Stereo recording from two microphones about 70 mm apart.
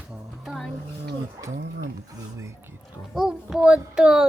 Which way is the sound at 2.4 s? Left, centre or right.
Right.